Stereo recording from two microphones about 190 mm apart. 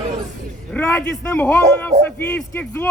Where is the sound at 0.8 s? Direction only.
10° left (ahead or behind).